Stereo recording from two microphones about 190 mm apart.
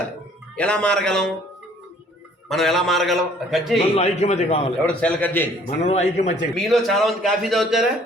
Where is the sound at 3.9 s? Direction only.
35° left (ahead or behind).